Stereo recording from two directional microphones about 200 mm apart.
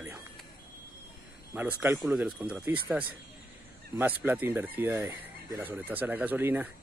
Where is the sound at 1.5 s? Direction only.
10° right (ahead or behind).